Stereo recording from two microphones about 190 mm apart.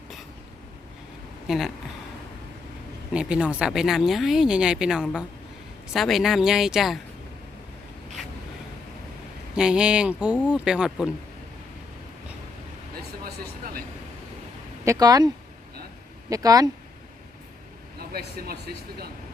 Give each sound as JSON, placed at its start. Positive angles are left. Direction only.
{"t": 1.5, "sound": "speech", "side_deg": 0}
{"t": 3.1, "sound": "speech", "side_deg": -5}
{"t": 9.6, "sound": "speech", "side_deg": -5}
{"t": 13.2, "sound": "vehicle", "side_deg": -55}
{"t": 14.8, "sound": "speech", "side_deg": -20}
{"t": 16.3, "sound": "speech", "side_deg": -20}
{"t": 18.1, "sound": "speech", "side_deg": -55}